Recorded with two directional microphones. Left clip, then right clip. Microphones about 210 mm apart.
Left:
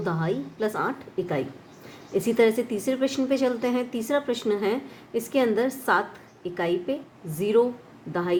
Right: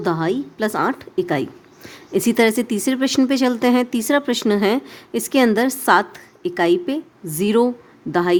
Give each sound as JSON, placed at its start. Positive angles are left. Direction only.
{"t": 0.0, "sound": "speech", "side_deg": -45}